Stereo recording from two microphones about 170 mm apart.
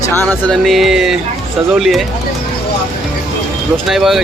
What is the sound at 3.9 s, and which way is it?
Speech, centre (ahead or behind).